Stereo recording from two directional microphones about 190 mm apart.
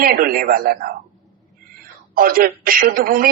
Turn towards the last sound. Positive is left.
turn(degrees=-50)  # may be behind; listen again after turning